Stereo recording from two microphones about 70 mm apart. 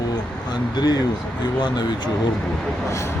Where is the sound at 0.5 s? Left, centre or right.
Left.